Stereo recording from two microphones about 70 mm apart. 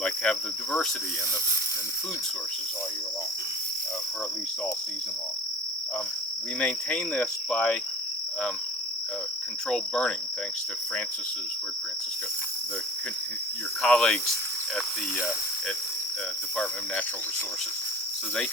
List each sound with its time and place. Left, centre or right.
0.0 s cricket: centre
6.6 s cricket: centre
9.6 s cricket: centre
13.8 s cricket: centre